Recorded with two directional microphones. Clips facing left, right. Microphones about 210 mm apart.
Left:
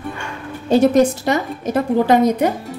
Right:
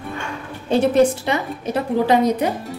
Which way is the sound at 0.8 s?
40° left (ahead or behind).